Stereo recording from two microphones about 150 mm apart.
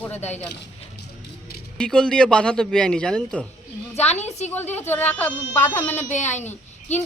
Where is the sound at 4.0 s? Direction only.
45° left (ahead or behind).